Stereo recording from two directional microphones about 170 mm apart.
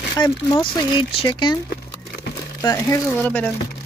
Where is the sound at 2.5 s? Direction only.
20° left (ahead or behind).